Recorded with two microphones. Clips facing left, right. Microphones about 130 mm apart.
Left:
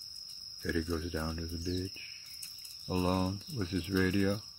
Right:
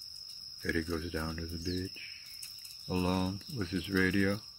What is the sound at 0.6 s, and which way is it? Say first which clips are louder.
Speech: even; 15° left (ahead or behind).